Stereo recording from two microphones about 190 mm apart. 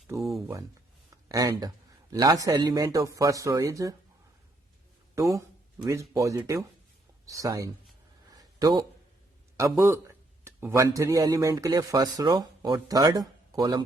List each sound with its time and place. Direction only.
0.2 s speech: centre (ahead or behind)
1.1 s a man's voice: 20° right (ahead or behind)
5.1 s a man's voice: 15° right (ahead or behind)
8.3 s a sound: 20° right (ahead or behind)
9.6 s a man's voice: 15° right (ahead or behind)